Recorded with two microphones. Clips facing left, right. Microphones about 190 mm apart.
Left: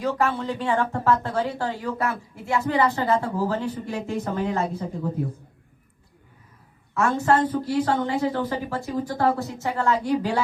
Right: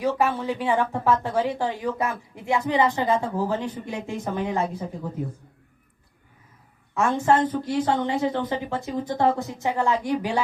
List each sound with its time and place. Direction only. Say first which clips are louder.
0.2 s speech: right 1 dB; 15° right (ahead or behind)
6.9 s speech: even; 15° right (ahead or behind)